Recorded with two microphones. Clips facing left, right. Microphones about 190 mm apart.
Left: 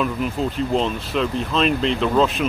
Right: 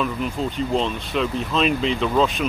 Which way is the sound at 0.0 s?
Centre (ahead or behind).